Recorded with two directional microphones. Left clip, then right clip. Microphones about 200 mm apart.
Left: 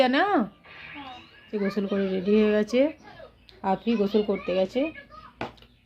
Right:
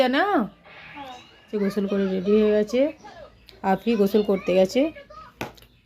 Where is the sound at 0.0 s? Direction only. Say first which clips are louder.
Right 1 dB; 5° right (ahead or behind).